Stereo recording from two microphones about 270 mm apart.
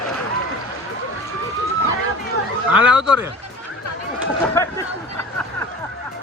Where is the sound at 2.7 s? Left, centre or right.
Centre.